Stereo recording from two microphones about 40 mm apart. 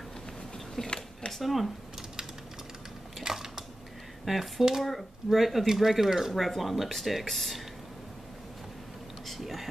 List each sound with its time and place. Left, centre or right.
0.8 s a sound: left
1.3 s speech: centre
3.3 s a sound: centre
4.2 s speech: centre
6.3 s speech: centre
9.2 s whispering: centre